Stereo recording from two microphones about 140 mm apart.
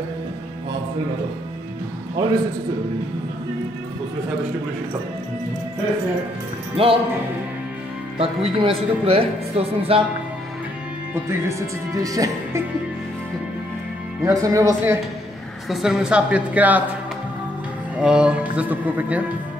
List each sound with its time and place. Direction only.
2.2 s speech: 30° right (ahead or behind)
6.8 s speech: 40° right (ahead or behind)
8.2 s speech: 40° right (ahead or behind)
11.4 s speech: 25° right (ahead or behind)
14.2 s speech: 25° right (ahead or behind)
15.7 s speech: 5° right (ahead or behind)
17.9 s speech: 5° right (ahead or behind)